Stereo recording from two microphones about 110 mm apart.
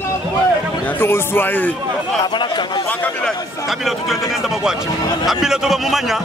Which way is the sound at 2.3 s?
45° left (ahead or behind).